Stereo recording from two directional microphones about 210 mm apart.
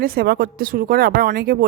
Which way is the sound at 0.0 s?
45° right (ahead or behind).